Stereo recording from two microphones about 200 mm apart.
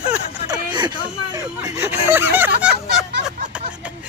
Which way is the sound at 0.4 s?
20° right (ahead or behind).